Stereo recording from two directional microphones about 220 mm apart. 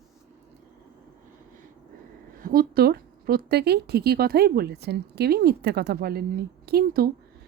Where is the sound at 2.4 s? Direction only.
40° right (ahead or behind).